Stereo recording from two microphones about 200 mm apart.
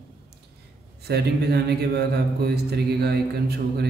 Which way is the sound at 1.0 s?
55° right (ahead or behind).